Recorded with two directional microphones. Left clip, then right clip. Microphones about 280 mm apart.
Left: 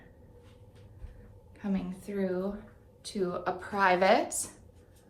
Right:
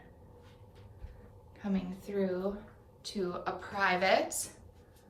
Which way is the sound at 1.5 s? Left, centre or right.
Centre.